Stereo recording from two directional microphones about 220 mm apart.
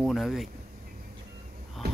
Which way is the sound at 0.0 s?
Centre (ahead or behind).